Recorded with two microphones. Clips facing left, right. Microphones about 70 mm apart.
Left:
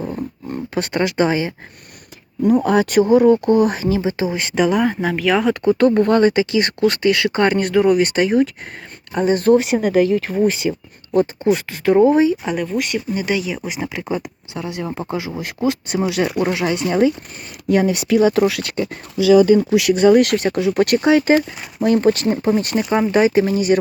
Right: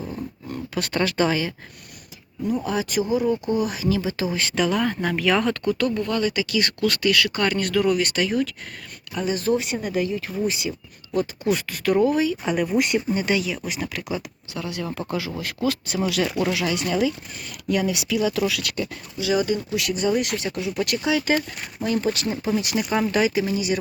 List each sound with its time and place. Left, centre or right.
0.2 s a sound: left
2.4 s speech: left; by 5.5 s centre
5.6 s speech: left
11.5 s speech: left
12.6 s speech: centre
13.2 s speech: centre; by 18.6 s left
18.6 s speech: left
19.7 s speech: left
22.7 s speech: left